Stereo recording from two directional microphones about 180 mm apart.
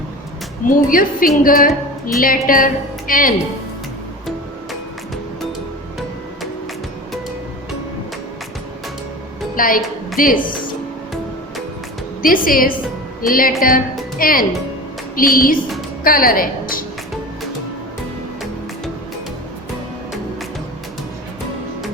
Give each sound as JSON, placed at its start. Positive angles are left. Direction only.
{"t": 0.7, "sound": "a woman's voice", "side_deg": 50}
{"t": 9.6, "sound": "a woman's voice", "side_deg": 50}
{"t": 12.2, "sound": "a woman's voice", "side_deg": 50}
{"t": 15.1, "sound": "music", "side_deg": 55}
{"t": 16.0, "sound": "a woman's voice", "side_deg": 55}